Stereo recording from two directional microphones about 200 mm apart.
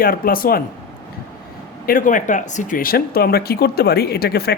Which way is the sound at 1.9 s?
40° left (ahead or behind).